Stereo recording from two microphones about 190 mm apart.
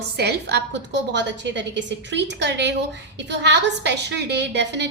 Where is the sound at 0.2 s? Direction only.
60° right (ahead or behind).